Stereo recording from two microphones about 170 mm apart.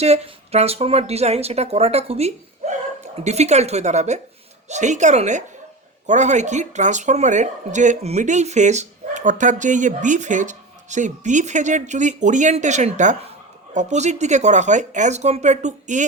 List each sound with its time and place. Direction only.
0.0 s speech: 40° right (ahead or behind)